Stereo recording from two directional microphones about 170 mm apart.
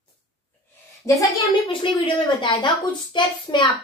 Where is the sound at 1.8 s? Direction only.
30° left (ahead or behind).